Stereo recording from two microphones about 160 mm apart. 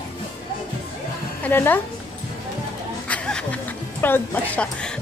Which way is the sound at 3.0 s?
5° left (ahead or behind).